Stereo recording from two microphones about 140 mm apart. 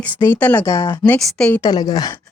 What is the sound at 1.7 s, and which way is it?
Speech, 30° left (ahead or behind).